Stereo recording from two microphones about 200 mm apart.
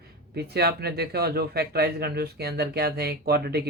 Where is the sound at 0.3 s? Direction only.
55° right (ahead or behind).